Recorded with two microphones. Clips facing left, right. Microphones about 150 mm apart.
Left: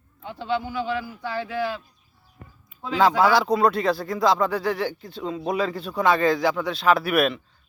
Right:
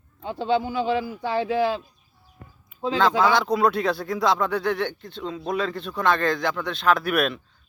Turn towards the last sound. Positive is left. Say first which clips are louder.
# left 2 dB
turn(degrees=0)  # may be behind; listen again after turning